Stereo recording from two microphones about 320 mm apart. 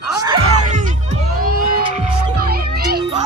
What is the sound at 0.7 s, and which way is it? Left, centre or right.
Music, right.